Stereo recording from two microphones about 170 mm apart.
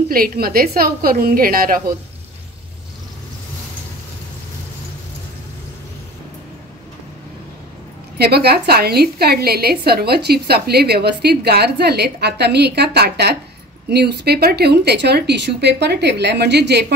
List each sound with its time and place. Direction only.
0.1 s a woman's voice: 60° right (ahead or behind)
8.2 s a woman's voice: 70° right (ahead or behind)